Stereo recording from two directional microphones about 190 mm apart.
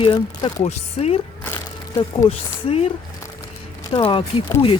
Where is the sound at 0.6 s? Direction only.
35° left (ahead or behind).